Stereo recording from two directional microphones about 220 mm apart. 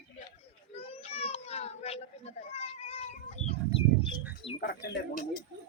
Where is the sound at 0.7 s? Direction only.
25° left (ahead or behind).